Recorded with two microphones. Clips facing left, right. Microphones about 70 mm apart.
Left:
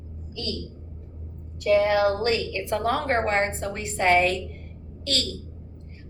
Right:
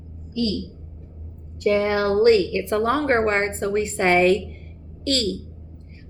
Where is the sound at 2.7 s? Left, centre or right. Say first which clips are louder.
Right 4 dB; right.